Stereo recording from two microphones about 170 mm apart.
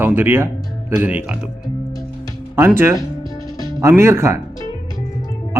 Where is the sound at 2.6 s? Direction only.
15° right (ahead or behind).